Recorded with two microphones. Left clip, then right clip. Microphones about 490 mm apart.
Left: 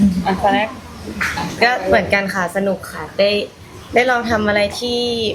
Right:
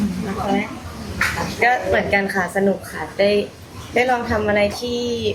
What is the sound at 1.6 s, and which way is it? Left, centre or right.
Speech, left.